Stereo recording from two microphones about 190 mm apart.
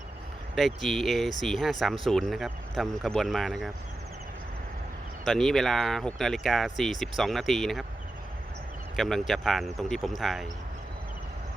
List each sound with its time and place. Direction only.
0.5 s speech: centre (ahead or behind)
5.2 s speech: centre (ahead or behind)
9.0 s speech: centre (ahead or behind)